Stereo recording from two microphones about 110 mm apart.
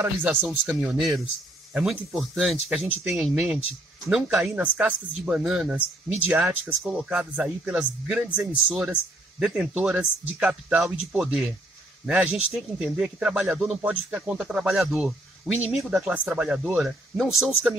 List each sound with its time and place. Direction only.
0.0 s speech: 15° right (ahead or behind)
3.3 s speech: 10° right (ahead or behind)